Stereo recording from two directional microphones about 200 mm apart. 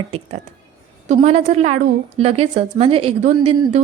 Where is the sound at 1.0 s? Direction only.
35° right (ahead or behind).